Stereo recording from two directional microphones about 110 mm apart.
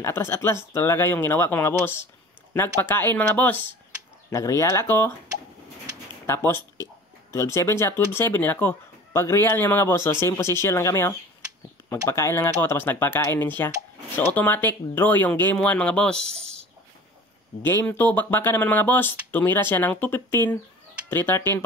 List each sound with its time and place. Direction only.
0.0 s speech: 20° left (ahead or behind)
6.2 s speech: 25° left (ahead or behind); by 16.3 s 5° left (ahead or behind)
17.6 s speech: 20° left (ahead or behind)